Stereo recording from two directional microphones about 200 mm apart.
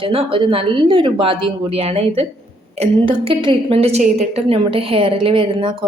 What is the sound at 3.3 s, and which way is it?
A woman's voice, 25° right (ahead or behind).